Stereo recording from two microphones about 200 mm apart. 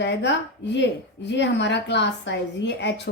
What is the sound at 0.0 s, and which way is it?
A woman's voice, 60° left (ahead or behind).